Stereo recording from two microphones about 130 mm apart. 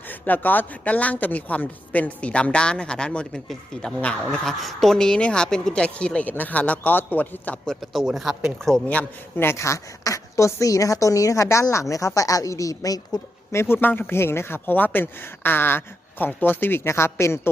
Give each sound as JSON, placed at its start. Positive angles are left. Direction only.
{"t": 0.1, "sound": "a man's voice", "side_deg": 15}
{"t": 13.6, "sound": "speech", "side_deg": 15}